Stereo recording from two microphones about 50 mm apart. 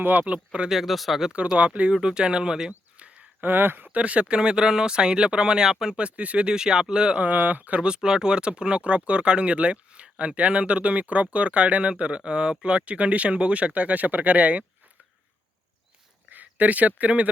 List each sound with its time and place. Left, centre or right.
0.0 s speech: right
0.7 s speech: centre
1.5 s speech: right
3.4 s speech: right
3.8 s speech: right
6.1 s speech: right
7.3 s speech: right
7.8 s speech: centre
16.3 s speech: right